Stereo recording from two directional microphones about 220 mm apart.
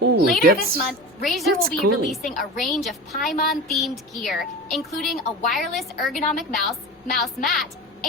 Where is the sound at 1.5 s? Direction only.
40° right (ahead or behind).